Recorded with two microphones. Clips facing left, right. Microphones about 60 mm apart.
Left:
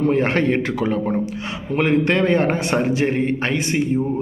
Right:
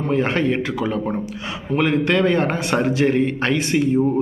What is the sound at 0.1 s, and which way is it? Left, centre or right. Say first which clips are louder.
A man's voice: left 1 dB; left.